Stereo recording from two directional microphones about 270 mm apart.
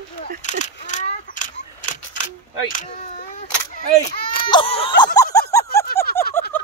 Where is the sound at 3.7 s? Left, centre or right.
Left.